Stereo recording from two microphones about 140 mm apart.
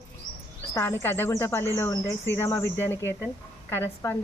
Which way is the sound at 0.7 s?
15° left (ahead or behind).